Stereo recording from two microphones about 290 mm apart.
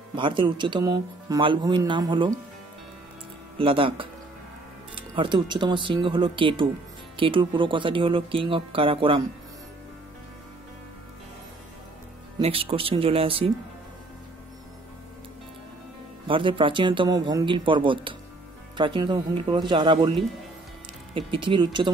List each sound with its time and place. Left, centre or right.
0.1 s speech: centre
3.5 s speech: centre
12.4 s speech: centre
16.3 s speech: centre